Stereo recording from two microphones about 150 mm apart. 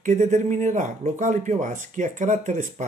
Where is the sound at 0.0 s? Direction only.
55° right (ahead or behind).